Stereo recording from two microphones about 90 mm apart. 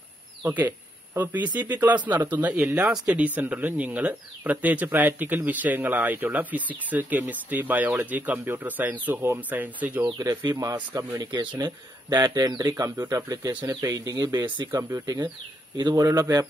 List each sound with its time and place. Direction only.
0.5 s speech: 20° right (ahead or behind)
2.9 s speech: 5° right (ahead or behind)
10.0 s speech: 45° right (ahead or behind)